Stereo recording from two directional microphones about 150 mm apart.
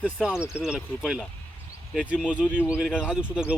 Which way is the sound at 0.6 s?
5° right (ahead or behind).